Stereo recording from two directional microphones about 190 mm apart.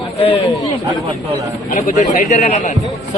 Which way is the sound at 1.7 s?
45° left (ahead or behind).